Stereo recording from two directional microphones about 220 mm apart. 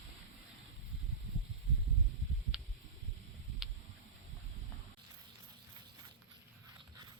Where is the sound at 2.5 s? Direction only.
5° right (ahead or behind).